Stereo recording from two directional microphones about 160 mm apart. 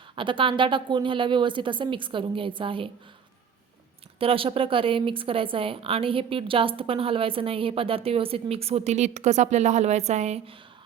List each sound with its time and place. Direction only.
0.2 s a woman's voice: 30° right (ahead or behind)
4.2 s a woman's voice: 35° right (ahead or behind)